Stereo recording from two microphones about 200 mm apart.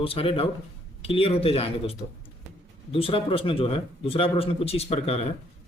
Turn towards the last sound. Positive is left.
turn(degrees=30)  # may be behind; listen again after turning